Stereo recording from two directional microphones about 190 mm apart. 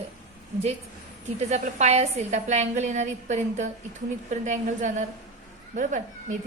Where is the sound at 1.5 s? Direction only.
35° right (ahead or behind).